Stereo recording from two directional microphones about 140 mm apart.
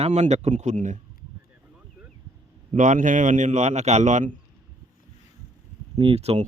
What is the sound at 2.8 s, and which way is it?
A man's voice, 65° right (ahead or behind).